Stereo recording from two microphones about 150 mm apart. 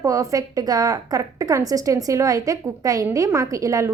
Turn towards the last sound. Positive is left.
turn(degrees=-20)  # may be behind; listen again after turning